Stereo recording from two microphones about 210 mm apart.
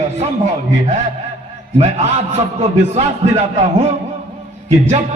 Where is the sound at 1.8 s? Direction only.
30° right (ahead or behind).